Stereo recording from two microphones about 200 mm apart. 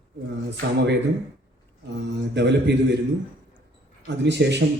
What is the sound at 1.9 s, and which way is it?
Speech, 60° right (ahead or behind).